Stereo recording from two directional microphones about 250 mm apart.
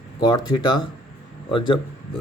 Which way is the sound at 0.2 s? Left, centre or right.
Centre.